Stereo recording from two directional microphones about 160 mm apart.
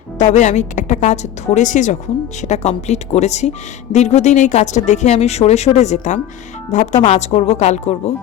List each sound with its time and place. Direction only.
0.3 s a woman's voice: 45° left (ahead or behind)